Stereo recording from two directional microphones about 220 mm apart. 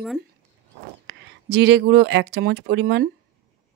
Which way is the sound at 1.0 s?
50° right (ahead or behind).